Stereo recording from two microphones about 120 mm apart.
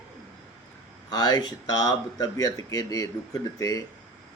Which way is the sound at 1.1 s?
30° left (ahead or behind).